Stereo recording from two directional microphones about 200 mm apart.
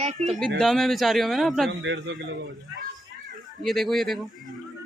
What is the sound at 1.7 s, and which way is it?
Speech, 65° right (ahead or behind).